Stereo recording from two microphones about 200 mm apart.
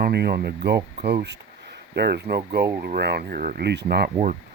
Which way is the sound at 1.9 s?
55° right (ahead or behind).